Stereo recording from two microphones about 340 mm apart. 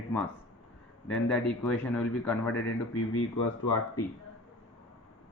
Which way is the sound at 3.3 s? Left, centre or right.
Left.